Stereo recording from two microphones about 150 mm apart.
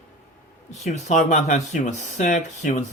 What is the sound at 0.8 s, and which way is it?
Speech, 50° left (ahead or behind).